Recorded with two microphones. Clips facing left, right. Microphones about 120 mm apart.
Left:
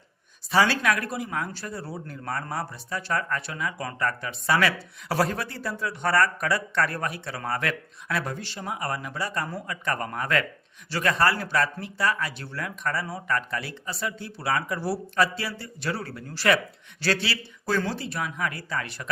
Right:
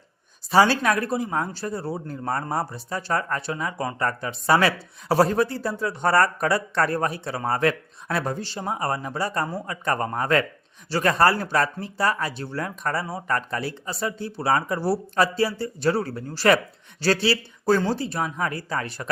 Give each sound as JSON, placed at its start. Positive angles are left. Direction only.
{"t": 0.5, "sound": "speech", "side_deg": -35}